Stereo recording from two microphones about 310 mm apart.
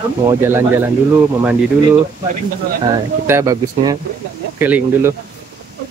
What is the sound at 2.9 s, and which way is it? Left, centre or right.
Speech, centre.